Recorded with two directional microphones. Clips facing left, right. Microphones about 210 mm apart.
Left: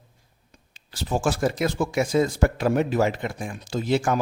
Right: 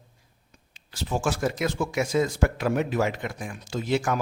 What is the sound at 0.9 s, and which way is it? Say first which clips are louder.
Speech: left 3 dB; 35° left (ahead or behind).